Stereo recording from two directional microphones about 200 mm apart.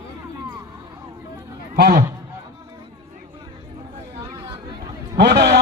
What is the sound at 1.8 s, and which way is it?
Speech, 50° right (ahead or behind).